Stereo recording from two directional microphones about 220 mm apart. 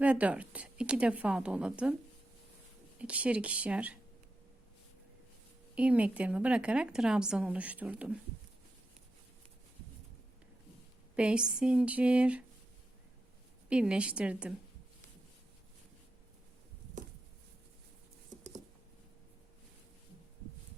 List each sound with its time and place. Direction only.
0.0 s speech: 5° right (ahead or behind)
3.0 s speech: 5° right (ahead or behind)
5.7 s speech: 5° right (ahead or behind)
11.2 s speech: 5° right (ahead or behind)
13.7 s speech: 5° right (ahead or behind)